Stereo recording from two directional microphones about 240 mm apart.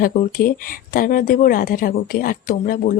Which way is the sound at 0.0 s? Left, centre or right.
Left.